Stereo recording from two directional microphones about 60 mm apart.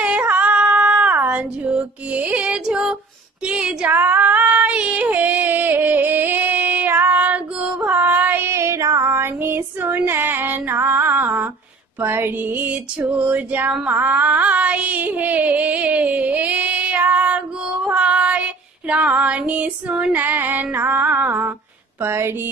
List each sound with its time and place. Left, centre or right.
0.0 s female singing: right
1.1 s music: right
3.4 s female singing: centre
3.9 s female singing: right
8.5 s female singing: right
12.0 s a sound: right
17.6 s child singing: centre
22.0 s a sound: right